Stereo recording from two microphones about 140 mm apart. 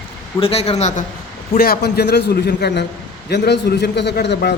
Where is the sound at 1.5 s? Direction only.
90° left.